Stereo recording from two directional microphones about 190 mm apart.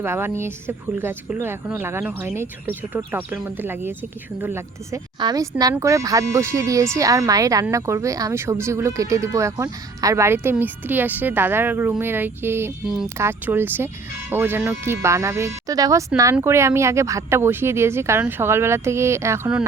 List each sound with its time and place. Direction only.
0.0 s a woman's voice: 10° right (ahead or behind)